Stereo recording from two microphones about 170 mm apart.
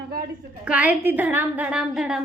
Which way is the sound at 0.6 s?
5° right (ahead or behind).